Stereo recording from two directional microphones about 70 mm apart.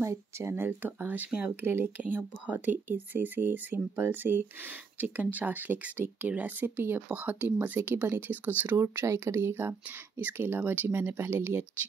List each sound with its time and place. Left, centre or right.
0.0 s speech: right
0.7 s speech: right
8.7 s speech: right